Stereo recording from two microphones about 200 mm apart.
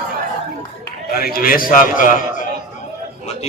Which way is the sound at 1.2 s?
45° left (ahead or behind).